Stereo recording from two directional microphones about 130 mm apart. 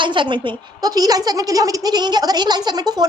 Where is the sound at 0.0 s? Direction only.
40° right (ahead or behind).